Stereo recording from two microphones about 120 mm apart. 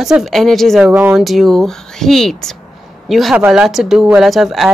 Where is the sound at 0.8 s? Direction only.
15° right (ahead or behind).